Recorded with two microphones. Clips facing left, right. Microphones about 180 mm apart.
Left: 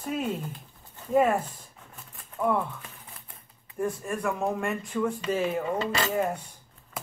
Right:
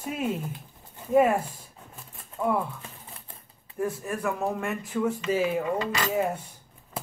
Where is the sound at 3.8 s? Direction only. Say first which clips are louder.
Even; 5° right (ahead or behind).